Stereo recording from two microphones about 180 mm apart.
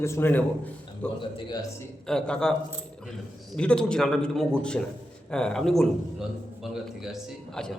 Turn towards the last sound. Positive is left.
turn(degrees=0)  # may be behind; listen again after turning